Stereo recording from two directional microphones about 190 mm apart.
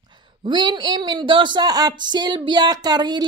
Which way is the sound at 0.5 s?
25° right (ahead or behind).